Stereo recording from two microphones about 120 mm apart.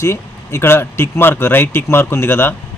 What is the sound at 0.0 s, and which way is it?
A man's voice, 25° left (ahead or behind).